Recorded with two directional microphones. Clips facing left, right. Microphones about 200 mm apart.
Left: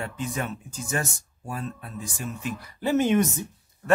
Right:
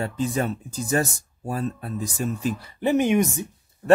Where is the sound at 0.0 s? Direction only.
35° right (ahead or behind).